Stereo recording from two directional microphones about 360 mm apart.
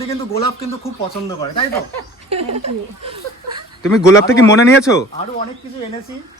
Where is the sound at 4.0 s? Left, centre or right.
Centre.